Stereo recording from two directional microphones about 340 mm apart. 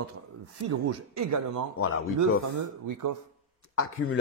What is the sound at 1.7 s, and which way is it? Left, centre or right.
Speech, left.